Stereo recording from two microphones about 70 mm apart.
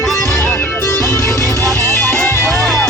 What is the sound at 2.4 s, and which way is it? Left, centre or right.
Music, centre.